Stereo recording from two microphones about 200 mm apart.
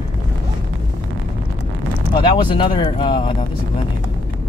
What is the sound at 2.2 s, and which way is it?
Speech, 25° left (ahead or behind).